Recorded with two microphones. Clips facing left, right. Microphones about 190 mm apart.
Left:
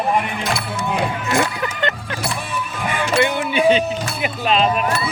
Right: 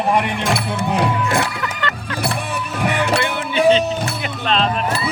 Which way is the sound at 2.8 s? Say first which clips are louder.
Right 1 dB; 70° right (ahead or behind).